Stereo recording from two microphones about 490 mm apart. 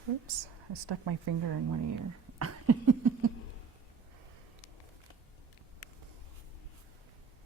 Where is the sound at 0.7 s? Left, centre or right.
Right.